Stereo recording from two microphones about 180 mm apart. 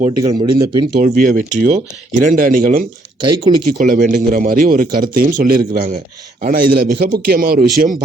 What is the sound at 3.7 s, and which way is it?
Speech, 50° right (ahead or behind).